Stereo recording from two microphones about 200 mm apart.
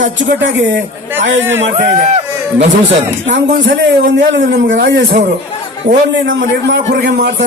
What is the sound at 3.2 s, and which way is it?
A man's voice, 65° right (ahead or behind).